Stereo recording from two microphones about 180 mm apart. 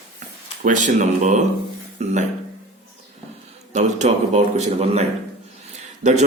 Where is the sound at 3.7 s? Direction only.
40° right (ahead or behind).